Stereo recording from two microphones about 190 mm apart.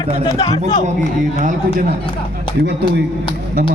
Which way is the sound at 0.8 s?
40° right (ahead or behind).